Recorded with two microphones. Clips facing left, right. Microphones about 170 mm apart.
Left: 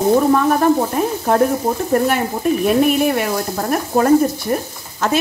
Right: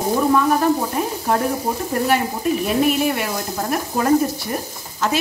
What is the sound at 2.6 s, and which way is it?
Speech, 50° left (ahead or behind).